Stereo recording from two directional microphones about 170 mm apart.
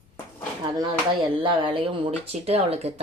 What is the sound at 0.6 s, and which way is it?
Speech, 20° right (ahead or behind).